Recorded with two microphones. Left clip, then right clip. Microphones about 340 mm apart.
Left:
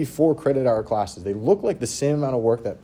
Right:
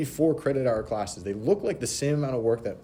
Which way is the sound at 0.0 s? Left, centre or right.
Centre.